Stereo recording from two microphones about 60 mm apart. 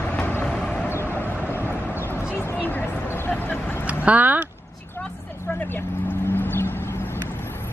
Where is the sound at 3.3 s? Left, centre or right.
Left.